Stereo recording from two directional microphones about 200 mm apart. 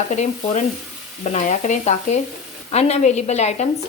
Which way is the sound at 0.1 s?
35° left (ahead or behind).